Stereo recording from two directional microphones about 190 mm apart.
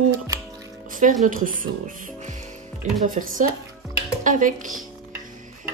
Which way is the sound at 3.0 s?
45° right (ahead or behind).